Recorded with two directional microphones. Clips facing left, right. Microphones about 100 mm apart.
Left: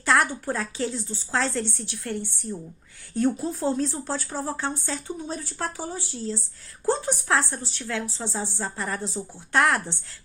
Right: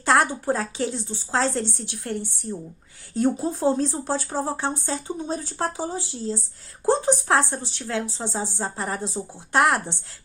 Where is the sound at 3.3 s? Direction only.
25° right (ahead or behind).